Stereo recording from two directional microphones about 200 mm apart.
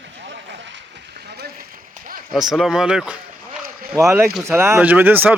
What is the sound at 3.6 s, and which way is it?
Boat, 45° right (ahead or behind).